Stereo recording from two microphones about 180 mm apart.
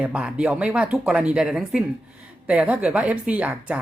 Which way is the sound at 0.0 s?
5° right (ahead or behind).